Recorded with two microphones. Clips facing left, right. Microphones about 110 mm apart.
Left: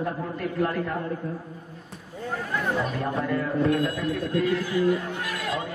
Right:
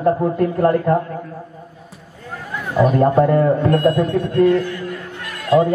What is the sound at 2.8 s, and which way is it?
A man's voice, 50° right (ahead or behind).